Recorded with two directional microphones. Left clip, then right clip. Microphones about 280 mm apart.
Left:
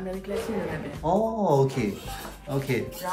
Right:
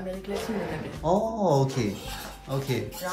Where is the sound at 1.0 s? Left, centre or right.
Right.